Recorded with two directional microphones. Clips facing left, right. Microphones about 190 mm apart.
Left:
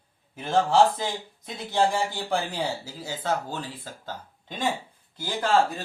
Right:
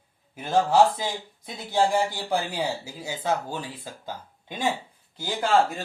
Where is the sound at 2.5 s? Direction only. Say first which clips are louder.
Right 1 dB; 10° right (ahead or behind).